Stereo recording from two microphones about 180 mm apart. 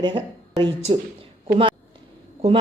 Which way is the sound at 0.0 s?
25° right (ahead or behind).